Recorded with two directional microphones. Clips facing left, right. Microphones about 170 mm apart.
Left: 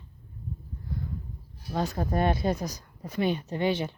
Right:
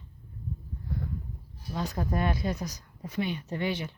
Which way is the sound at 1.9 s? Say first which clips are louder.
Left 2 dB; 30° left (ahead or behind).